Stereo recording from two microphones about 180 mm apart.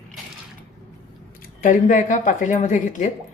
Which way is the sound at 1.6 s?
45° left (ahead or behind).